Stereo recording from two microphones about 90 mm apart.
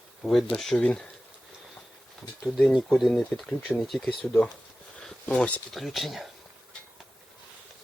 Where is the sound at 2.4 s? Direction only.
5° left (ahead or behind).